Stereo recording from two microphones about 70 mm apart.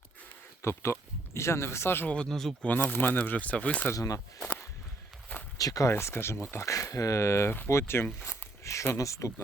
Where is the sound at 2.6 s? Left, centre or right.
Left.